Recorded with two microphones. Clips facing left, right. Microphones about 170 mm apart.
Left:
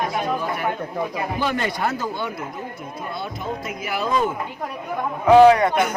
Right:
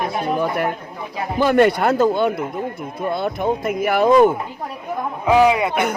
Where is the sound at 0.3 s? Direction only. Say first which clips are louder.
Right 4 dB; 60° right (ahead or behind).